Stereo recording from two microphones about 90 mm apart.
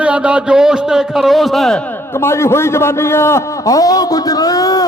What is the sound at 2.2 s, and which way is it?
A man's voice, 30° left (ahead or behind).